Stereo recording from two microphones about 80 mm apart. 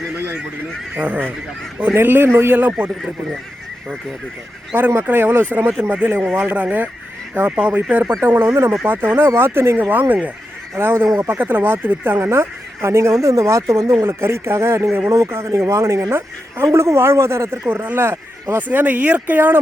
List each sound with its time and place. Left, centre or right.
0.9 s speech: centre
4.7 s speech: right
17.7 s speech: right